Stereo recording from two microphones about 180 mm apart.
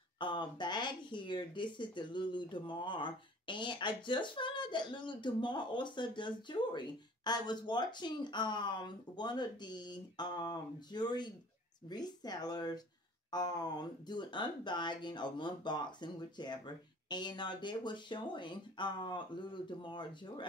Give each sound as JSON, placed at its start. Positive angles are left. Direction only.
{"t": 0.2, "sound": "speech", "side_deg": 25}